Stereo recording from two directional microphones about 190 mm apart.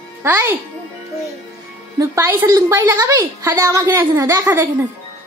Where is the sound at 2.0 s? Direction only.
15° right (ahead or behind).